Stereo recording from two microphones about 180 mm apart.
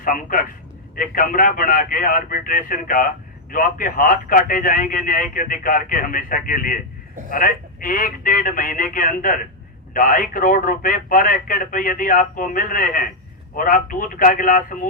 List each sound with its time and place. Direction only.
0.0 s speech: 50° left (ahead or behind)